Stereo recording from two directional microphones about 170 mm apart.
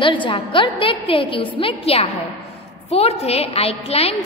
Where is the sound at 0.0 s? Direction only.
30° left (ahead or behind).